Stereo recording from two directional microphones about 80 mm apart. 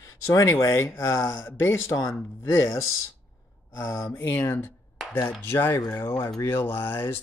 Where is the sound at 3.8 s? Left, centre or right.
Left.